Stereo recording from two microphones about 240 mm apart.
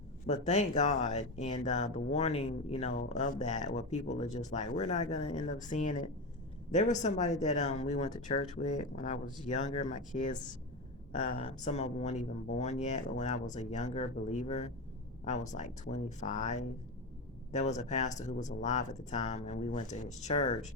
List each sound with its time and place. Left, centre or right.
0.3 s a man's voice: left
11.3 s speech: left